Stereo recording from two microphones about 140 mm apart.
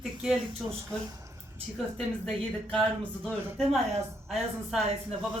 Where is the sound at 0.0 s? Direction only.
5° right (ahead or behind).